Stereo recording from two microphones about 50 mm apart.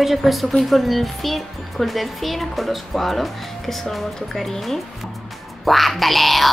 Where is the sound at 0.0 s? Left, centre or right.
Centre.